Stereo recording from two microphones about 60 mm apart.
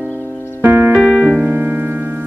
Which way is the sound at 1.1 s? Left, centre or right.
Left.